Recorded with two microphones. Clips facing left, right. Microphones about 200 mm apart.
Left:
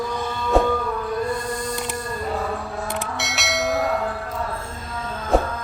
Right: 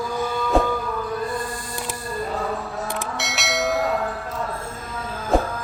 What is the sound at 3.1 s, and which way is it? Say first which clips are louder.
Bell: right 2 dB; centre (ahead or behind).